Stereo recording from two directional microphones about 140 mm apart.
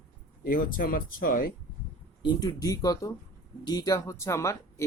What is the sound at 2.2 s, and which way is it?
Speech, 25° left (ahead or behind).